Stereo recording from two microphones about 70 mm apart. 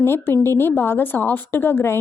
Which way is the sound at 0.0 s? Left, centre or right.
Left.